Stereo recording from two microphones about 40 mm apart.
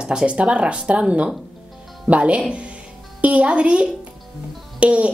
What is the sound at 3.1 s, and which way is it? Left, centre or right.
Speech, right.